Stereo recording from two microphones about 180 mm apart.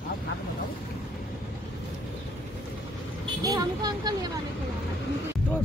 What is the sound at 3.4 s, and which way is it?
Vehicle, 20° right (ahead or behind).